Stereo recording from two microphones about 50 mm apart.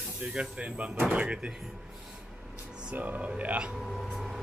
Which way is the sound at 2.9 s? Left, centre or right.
Right.